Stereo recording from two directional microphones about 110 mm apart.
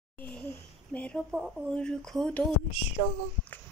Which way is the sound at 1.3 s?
5° right (ahead or behind).